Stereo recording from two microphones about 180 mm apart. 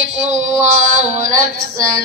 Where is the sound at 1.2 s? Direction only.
45° right (ahead or behind).